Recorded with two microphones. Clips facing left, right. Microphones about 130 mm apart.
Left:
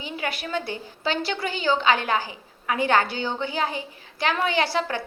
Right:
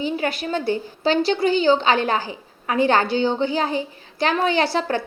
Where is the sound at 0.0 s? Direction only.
35° right (ahead or behind).